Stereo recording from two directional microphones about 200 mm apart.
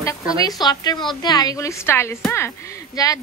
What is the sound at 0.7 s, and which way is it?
A woman's voice, 20° left (ahead or behind).